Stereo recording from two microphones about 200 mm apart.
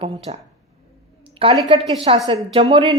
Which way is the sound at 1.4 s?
25° right (ahead or behind).